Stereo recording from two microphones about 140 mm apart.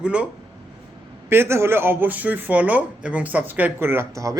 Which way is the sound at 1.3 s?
15° right (ahead or behind).